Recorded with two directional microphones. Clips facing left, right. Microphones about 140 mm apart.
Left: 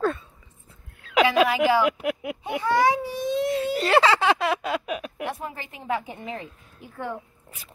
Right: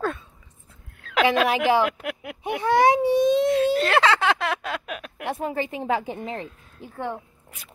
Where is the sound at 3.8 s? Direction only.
5° left (ahead or behind).